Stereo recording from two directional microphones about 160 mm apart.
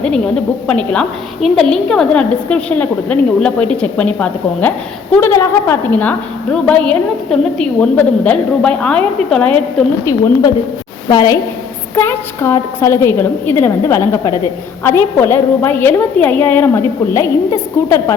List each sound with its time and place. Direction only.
0.7 s a woman's voice: 5° left (ahead or behind)
11.1 s a woman's voice: 25° left (ahead or behind)